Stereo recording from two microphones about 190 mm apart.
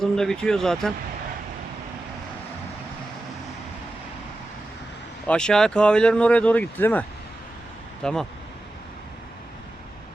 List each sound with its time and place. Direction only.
0.0 s speech: centre (ahead or behind)
5.3 s speech: 5° left (ahead or behind)
8.0 s speech: 5° left (ahead or behind)